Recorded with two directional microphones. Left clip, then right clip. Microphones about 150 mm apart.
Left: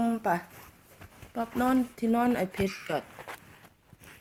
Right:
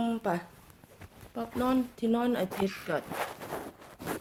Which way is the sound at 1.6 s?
45° left (ahead or behind).